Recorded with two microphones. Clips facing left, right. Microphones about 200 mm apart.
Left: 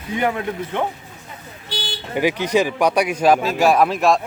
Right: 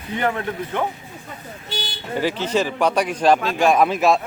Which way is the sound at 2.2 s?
15° left (ahead or behind).